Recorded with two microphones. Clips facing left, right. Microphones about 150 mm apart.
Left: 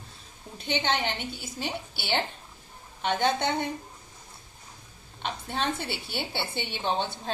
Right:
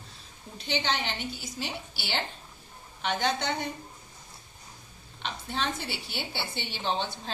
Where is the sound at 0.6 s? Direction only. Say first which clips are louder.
Left 2 dB; 55° left (ahead or behind).